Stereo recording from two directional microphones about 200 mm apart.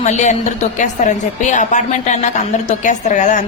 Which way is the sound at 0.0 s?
35° left (ahead or behind).